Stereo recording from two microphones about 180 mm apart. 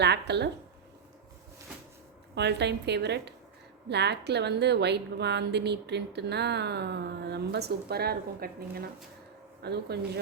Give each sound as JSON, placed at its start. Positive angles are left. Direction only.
{"t": 0.0, "sound": "a woman's voice", "side_deg": -70}
{"t": 2.3, "sound": "a woman's voice", "side_deg": -70}